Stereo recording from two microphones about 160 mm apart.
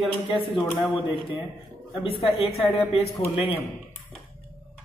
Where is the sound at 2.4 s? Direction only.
40° left (ahead or behind).